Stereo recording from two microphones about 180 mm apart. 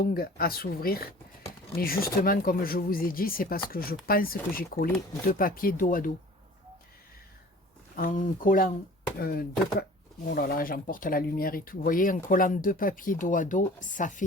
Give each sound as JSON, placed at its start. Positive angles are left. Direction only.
{"t": 0.0, "sound": "speech", "side_deg": 55}
{"t": 7.9, "sound": "speech", "side_deg": 50}